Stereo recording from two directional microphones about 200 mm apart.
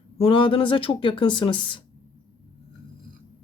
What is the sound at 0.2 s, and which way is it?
Speech, 25° left (ahead or behind).